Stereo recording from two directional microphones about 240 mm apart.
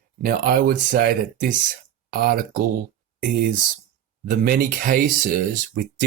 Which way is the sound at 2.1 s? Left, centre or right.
Right.